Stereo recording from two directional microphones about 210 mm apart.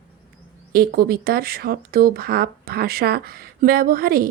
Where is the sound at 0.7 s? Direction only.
45° right (ahead or behind).